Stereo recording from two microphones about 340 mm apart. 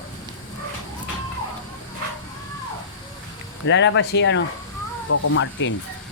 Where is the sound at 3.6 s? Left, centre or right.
Left.